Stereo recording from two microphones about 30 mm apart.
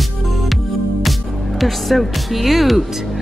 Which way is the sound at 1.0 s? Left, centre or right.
Centre.